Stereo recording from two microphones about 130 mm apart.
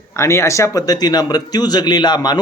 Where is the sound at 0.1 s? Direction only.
20° left (ahead or behind).